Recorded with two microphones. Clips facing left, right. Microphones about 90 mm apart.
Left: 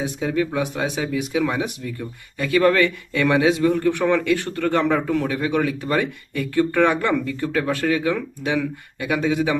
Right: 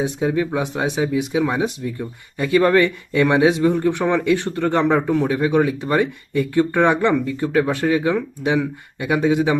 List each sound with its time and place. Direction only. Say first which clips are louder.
0.0 s speech: right 3 dB; 20° right (ahead or behind)